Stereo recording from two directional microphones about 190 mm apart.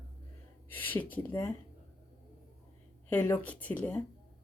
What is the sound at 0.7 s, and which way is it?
Speech, 10° left (ahead or behind).